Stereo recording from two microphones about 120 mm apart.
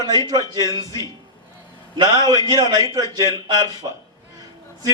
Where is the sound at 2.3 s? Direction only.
30° right (ahead or behind).